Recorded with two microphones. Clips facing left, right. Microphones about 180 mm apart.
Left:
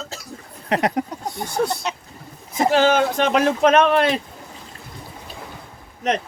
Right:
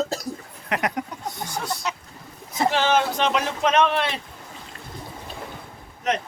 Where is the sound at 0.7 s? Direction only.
35° left (ahead or behind).